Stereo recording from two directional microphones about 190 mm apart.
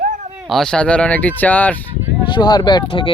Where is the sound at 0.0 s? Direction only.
40° right (ahead or behind).